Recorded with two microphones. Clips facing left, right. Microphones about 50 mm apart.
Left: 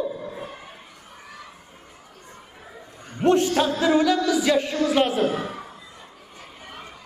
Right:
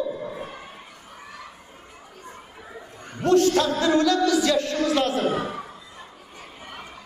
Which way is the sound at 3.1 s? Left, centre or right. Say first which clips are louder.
Right 1 dB; left.